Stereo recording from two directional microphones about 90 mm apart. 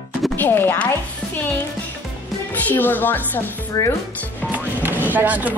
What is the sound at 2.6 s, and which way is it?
Speech, 20° left (ahead or behind).